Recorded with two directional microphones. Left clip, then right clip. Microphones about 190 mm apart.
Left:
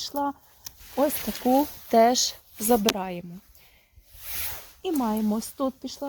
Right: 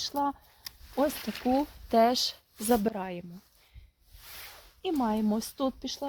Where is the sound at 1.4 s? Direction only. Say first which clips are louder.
Left 6 dB; 40° left (ahead or behind).